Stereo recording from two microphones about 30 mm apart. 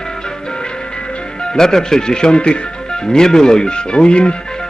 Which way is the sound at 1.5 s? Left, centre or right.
Centre.